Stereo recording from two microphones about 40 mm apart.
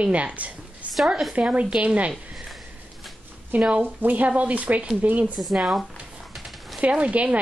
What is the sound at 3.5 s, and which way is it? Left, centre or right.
A woman's voice, right.